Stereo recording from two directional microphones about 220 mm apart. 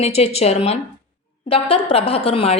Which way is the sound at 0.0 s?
30° left (ahead or behind).